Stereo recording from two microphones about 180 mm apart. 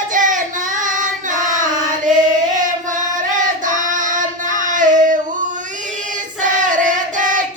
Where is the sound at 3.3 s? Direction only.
45° right (ahead or behind).